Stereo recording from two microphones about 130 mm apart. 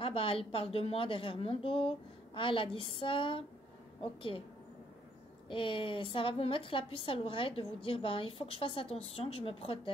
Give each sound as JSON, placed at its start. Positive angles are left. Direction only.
{"t": 0.0, "sound": "a woman's voice", "side_deg": 45}
{"t": 5.5, "sound": "a woman's voice", "side_deg": 40}